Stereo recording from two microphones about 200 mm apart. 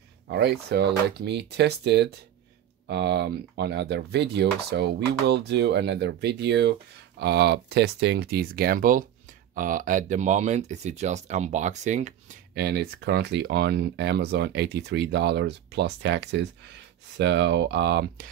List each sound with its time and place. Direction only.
0.3 s speech: 55° right (ahead or behind); by 12.4 s 35° right (ahead or behind)
12.5 s speech: 55° right (ahead or behind)